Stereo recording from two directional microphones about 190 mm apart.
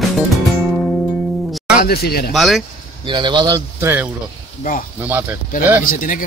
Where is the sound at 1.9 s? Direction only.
55° left (ahead or behind).